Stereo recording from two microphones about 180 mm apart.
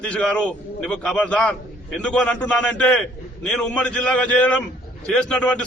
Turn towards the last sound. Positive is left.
turn(degrees=5)  # may be behind; listen again after turning